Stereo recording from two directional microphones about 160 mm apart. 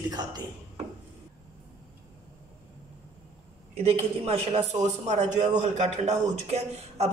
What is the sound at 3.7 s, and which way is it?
A woman's voice, 40° right (ahead or behind).